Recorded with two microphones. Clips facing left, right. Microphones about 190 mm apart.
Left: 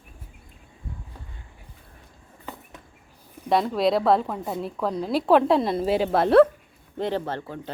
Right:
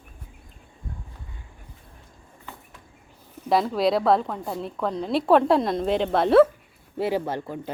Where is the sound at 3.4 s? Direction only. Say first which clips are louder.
Even; centre (ahead or behind).